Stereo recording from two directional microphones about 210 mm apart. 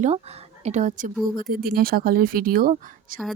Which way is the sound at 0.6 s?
35° right (ahead or behind).